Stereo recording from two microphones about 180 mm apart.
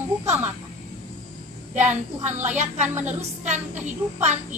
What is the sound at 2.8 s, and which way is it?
Speech, 10° right (ahead or behind).